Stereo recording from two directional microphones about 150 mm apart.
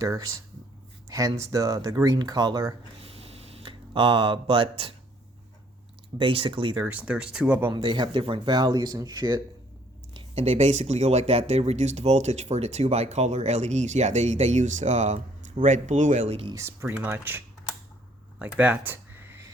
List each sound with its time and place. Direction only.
0.0 s speech: 20° right (ahead or behind)
3.0 s a sound: 40° right (ahead or behind)
6.1 s speech: 35° right (ahead or behind)
6.8 s speech: 10° right (ahead or behind)
7.7 s speech: 30° right (ahead or behind)
10.2 s speech: 45° right (ahead or behind)
16.5 s speech: 20° right (ahead or behind)
18.3 s a sound: 10° right (ahead or behind)